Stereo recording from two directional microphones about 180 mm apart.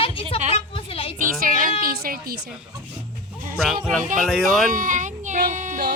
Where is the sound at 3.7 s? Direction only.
Centre (ahead or behind).